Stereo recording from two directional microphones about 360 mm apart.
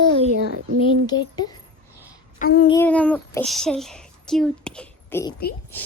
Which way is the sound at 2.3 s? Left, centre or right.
Left.